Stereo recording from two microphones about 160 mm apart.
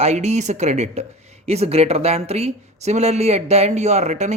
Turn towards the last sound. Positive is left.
turn(degrees=-45)  # may be behind; listen again after turning